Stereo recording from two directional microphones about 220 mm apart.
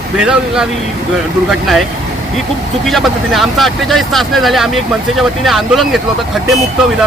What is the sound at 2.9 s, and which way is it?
Speech, centre (ahead or behind).